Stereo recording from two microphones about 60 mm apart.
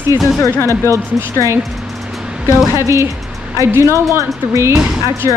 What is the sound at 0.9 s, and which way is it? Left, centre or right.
Speech, right.